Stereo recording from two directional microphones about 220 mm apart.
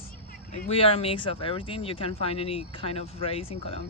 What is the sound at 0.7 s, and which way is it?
Speech, 25° left (ahead or behind).